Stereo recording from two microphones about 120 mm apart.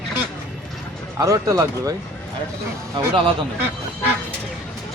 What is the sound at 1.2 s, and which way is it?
Speech, 30° right (ahead or behind).